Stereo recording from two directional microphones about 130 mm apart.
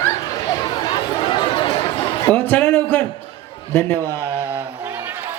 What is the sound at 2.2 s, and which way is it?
Speech, 15° left (ahead or behind).